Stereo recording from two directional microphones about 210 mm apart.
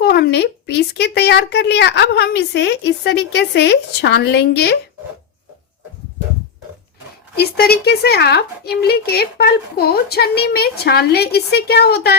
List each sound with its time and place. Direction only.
0.0 s a woman's voice: 50° left (ahead or behind)
7.3 s a woman's voice: 50° left (ahead or behind)